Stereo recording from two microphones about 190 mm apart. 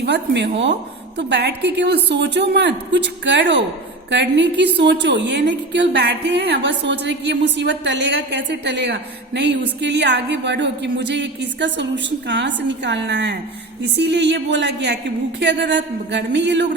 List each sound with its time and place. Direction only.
0.0 s a woman's voice: 60° right (ahead or behind)